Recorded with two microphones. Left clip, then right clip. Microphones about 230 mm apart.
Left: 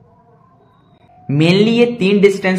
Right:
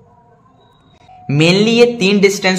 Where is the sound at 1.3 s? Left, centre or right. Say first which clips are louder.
Right 1 dB; centre.